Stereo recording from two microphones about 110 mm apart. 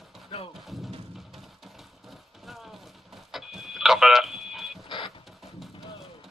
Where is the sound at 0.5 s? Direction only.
Centre (ahead or behind).